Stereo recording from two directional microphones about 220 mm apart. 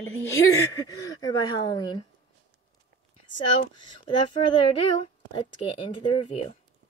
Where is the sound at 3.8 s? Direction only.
20° left (ahead or behind).